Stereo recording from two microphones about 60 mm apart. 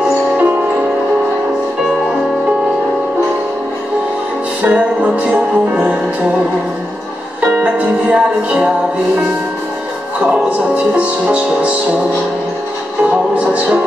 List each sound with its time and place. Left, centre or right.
0.4 s music: right
4.6 s music: right
7.5 s music: right
11.0 s music: right
13.4 s music: right